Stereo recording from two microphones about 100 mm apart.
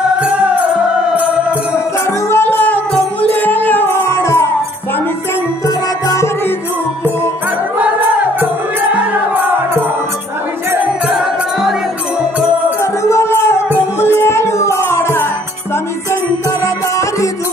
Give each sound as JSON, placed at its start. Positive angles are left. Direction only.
{"t": 2.2, "sound": "music", "side_deg": 20}
{"t": 6.0, "sound": "music", "side_deg": 30}
{"t": 7.8, "sound": "music", "side_deg": -15}
{"t": 11.1, "sound": "music", "side_deg": -5}
{"t": 12.8, "sound": "music", "side_deg": 30}